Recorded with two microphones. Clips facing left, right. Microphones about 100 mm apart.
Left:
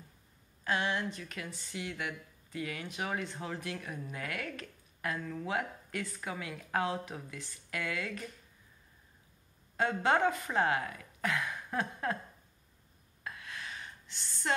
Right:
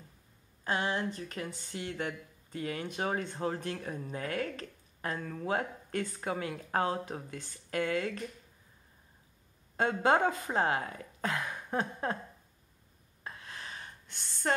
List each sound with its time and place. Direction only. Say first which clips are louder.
0.7 s speech: right 1 dB; 35° right (ahead or behind)
10.0 s speech: right 2 dB; 35° right (ahead or behind)
13.2 s gasp: left 1 dB; 30° right (ahead or behind)
14.0 s a sound: right 5 dB; 55° right (ahead or behind)